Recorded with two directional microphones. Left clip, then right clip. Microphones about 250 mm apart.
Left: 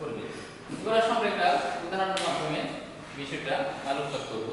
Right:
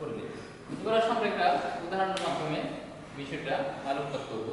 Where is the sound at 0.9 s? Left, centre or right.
Centre.